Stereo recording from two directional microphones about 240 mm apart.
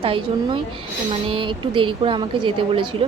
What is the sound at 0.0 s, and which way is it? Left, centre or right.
A woman's voice, right.